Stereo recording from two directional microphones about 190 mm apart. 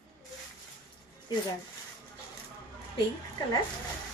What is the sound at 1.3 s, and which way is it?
Speech, 25° left (ahead or behind).